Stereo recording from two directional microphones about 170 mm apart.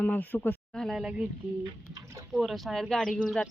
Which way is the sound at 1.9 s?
20° right (ahead or behind).